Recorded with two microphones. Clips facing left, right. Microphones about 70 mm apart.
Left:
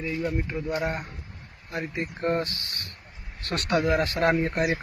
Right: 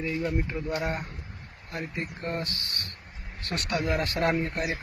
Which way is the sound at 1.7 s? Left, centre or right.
Left.